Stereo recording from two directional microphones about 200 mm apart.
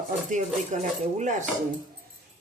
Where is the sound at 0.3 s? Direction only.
40° right (ahead or behind).